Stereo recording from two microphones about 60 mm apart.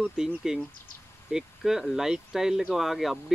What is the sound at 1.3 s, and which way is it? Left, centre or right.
Speech, centre.